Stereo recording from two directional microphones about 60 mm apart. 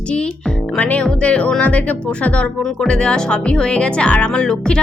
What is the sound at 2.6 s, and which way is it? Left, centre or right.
Speech, centre.